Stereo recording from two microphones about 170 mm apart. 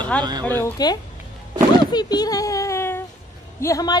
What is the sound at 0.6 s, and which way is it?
A woman's voice, 25° left (ahead or behind).